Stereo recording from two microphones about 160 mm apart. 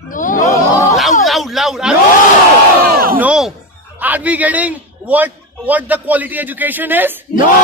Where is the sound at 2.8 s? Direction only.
70° right (ahead or behind).